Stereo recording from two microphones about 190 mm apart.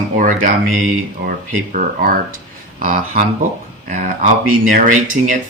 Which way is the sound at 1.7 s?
50° right (ahead or behind).